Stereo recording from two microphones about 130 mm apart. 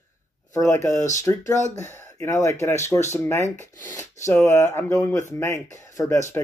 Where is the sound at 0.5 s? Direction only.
25° left (ahead or behind).